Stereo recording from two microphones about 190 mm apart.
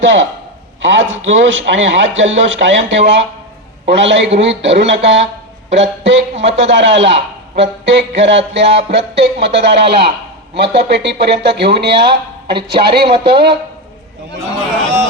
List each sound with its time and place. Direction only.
0.0 s a man's voice: 75° right (ahead or behind); by 13.6 s 60° right (ahead or behind)